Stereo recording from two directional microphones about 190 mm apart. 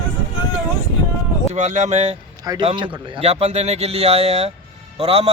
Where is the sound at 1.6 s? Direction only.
40° right (ahead or behind).